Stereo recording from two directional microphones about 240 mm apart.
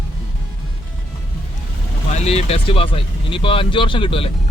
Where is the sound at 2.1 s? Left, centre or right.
Left.